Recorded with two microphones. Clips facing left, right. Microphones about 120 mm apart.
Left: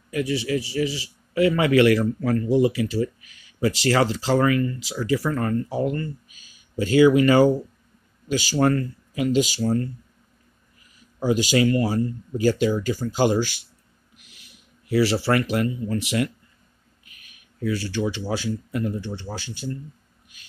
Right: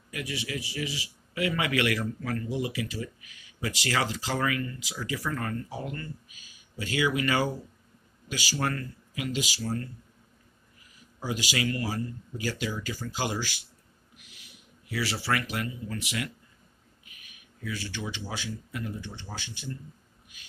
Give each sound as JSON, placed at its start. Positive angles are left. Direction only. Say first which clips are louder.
{"t": 0.1, "sound": "a man's voice", "louder": "left 11 dB", "side_deg": 30}
{"t": 11.2, "sound": "a man's voice", "louder": "left 11 dB", "side_deg": 30}
{"t": 14.9, "sound": "a man's voice", "louder": "left 10 dB", "side_deg": 35}
{"t": 17.6, "sound": "a man's voice", "louder": "left 11 dB", "side_deg": 40}